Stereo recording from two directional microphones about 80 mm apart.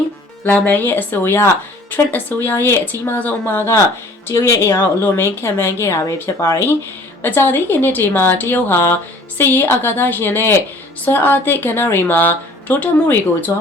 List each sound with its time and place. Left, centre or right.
0.4 s a woman's voice: centre